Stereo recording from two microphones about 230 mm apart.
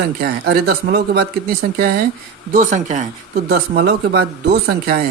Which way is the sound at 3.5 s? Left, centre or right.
Right.